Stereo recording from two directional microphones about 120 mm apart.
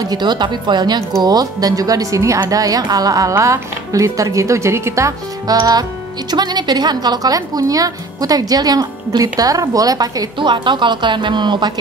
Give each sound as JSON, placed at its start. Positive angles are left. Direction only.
{"t": 0.0, "sound": "a woman's voice", "side_deg": -35}